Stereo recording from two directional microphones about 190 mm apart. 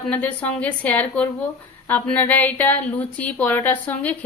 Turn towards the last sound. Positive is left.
turn(degrees=10)  # may be behind; listen again after turning